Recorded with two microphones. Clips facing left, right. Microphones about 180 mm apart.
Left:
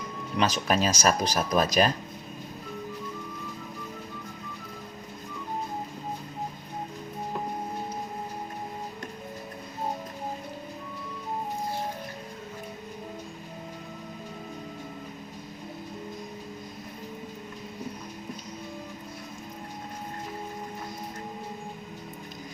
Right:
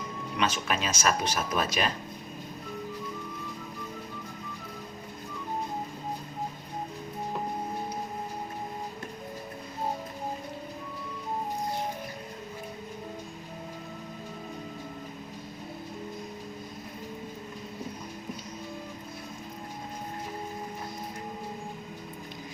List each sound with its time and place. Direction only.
0.3 s speech: 35° left (ahead or behind)